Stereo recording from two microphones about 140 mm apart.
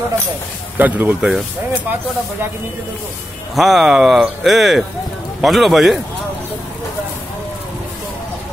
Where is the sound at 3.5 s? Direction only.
Centre (ahead or behind).